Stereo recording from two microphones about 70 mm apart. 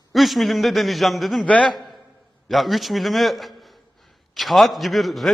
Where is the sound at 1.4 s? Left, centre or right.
Centre.